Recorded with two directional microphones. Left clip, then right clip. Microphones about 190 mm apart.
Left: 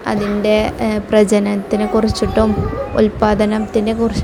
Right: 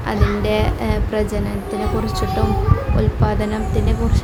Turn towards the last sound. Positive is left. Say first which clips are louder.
# left 7 dB
turn(degrees=25)  # may be behind; listen again after turning